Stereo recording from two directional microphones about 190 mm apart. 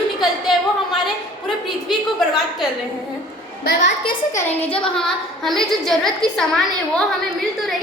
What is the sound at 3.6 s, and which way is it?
Speech, 50° left (ahead or behind).